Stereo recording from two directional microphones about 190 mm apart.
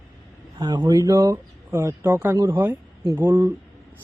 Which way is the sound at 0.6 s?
20° right (ahead or behind).